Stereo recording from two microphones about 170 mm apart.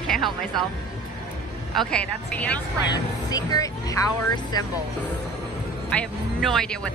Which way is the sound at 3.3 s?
20° left (ahead or behind).